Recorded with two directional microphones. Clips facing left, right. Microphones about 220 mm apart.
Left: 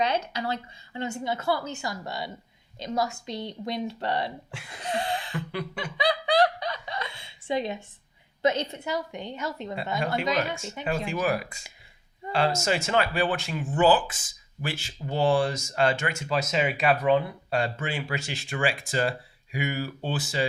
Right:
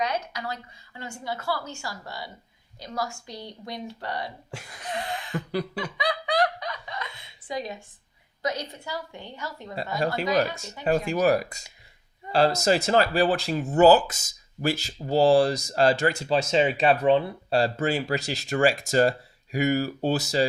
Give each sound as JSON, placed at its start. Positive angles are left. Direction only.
{"t": 0.0, "sound": "a woman's voice", "side_deg": 30}
{"t": 4.8, "sound": "a sound", "side_deg": 30}
{"t": 5.5, "sound": "speech", "side_deg": -35}
{"t": 6.0, "sound": "fowl", "side_deg": 30}
{"t": 8.4, "sound": "a woman's voice", "side_deg": 25}
{"t": 10.5, "sound": "speech", "side_deg": -40}